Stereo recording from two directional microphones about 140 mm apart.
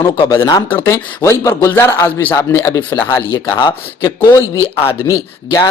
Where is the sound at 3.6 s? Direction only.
35° left (ahead or behind).